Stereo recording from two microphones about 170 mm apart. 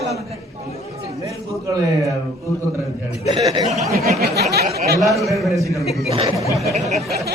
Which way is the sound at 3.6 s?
Centre (ahead or behind).